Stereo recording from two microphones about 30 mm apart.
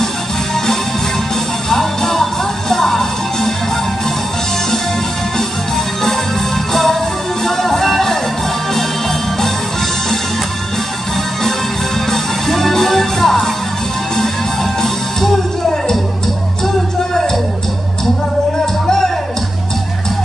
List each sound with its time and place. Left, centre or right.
1.7 s music: centre
6.7 s music: centre
12.1 s music: centre
18.9 s music: centre